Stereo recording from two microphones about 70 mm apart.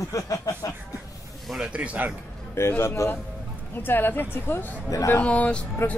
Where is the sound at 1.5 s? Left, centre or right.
Centre.